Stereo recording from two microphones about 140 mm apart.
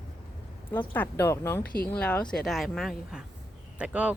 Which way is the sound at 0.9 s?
15° left (ahead or behind).